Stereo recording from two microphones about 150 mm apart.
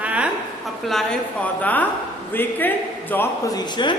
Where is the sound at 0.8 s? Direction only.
Centre (ahead or behind).